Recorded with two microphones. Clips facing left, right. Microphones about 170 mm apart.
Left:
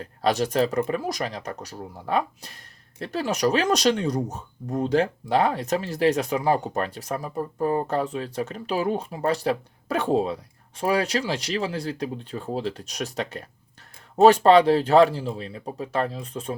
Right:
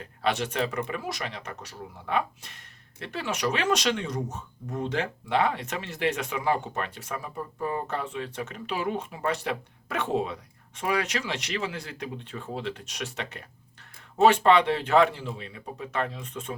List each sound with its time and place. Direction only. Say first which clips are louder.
0.0 s speech: left 5 dB; 40° left (ahead or behind)